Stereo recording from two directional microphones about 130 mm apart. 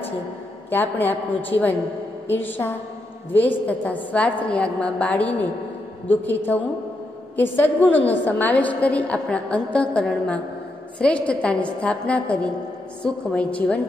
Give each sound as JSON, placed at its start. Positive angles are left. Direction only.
{"t": 0.7, "sound": "a woman's voice", "side_deg": 15}